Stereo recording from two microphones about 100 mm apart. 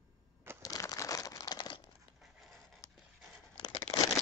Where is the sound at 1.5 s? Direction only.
50° left (ahead or behind).